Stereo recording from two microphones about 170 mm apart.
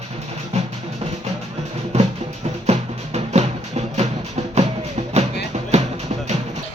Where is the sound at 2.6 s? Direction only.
40° right (ahead or behind).